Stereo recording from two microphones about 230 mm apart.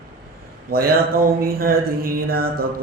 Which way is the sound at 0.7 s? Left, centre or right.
Right.